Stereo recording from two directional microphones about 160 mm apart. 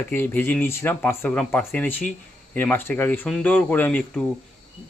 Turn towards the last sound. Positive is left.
turn(degrees=10)  # may be behind; listen again after turning